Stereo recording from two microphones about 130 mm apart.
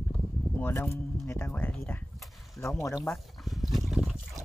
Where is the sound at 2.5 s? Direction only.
20° left (ahead or behind).